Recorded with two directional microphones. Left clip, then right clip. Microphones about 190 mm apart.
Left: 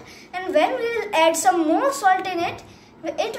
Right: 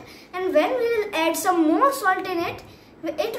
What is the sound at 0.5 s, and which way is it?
A woman's voice, 10° right (ahead or behind).